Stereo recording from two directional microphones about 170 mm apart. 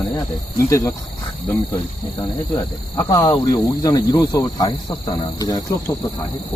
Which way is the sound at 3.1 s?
20° left (ahead or behind).